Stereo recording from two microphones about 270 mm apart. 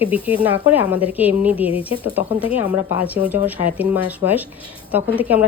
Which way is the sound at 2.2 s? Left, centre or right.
Left.